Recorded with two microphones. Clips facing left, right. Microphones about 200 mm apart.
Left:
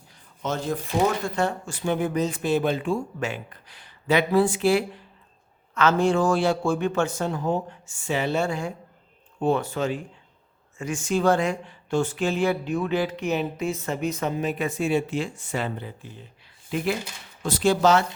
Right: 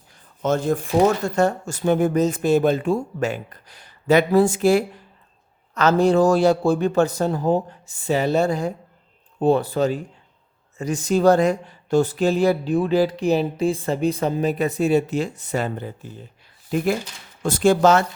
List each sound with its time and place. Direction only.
0.4 s speech: 50° right (ahead or behind)